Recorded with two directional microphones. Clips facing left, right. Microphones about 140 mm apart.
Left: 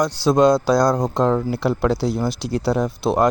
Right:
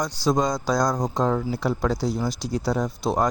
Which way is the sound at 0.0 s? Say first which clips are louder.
Left 7 dB; 70° left (ahead or behind).